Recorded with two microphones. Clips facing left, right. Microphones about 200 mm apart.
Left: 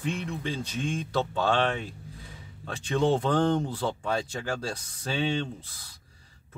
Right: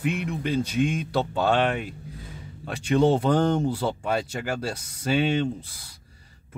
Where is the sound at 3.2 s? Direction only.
10° right (ahead or behind).